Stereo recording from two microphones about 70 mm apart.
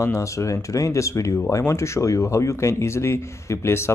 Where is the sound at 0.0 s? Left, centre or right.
Left.